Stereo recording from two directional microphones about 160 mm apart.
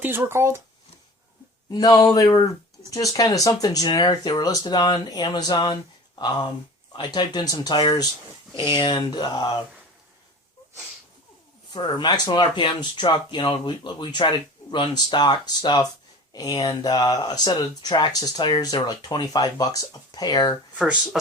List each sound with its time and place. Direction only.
0.0 s speech: 15° right (ahead or behind)
1.7 s speech: 25° left (ahead or behind)
11.7 s speech: 30° left (ahead or behind)
20.7 s speech: 5° right (ahead or behind)